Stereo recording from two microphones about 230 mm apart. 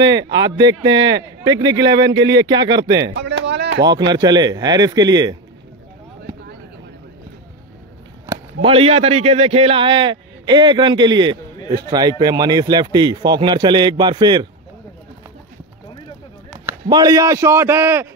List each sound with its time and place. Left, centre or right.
0.0 s a man's voice: centre
1.9 s speech: right
2.1 s a man's voice: centre
3.2 s a sound: right
4.1 s a man's voice: centre
8.3 s a sound: centre
8.6 s a man's voice: right
16.5 s speech: centre